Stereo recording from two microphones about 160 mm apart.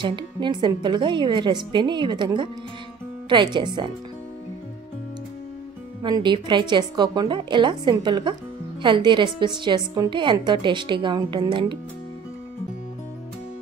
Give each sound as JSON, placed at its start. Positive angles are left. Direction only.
{"t": 0.0, "sound": "a woman's voice", "side_deg": -30}
{"t": 3.5, "sound": "a woman's voice", "side_deg": -30}
{"t": 6.0, "sound": "a woman's voice", "side_deg": -30}